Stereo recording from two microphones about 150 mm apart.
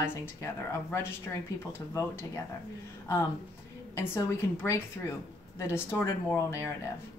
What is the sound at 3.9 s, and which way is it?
A woman's voice, 15° left (ahead or behind).